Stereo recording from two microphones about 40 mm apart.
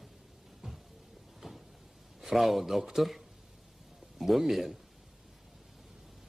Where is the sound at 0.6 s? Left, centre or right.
Centre.